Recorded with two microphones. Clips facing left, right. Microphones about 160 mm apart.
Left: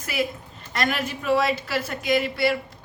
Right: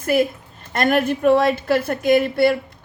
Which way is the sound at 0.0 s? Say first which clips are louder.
Right 9 dB; 50° right (ahead or behind).